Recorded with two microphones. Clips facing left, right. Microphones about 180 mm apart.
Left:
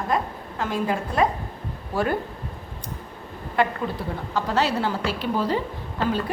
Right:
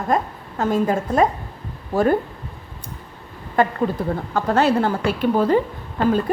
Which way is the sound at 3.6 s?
45° right (ahead or behind).